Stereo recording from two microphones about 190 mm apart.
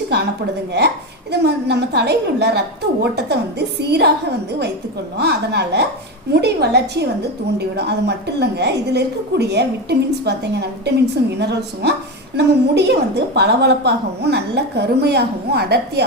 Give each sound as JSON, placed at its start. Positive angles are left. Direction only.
{"t": 0.1, "sound": "a woman's voice", "side_deg": -60}
{"t": 1.3, "sound": "a woman's voice", "side_deg": -60}
{"t": 5.1, "sound": "a woman's voice", "side_deg": -60}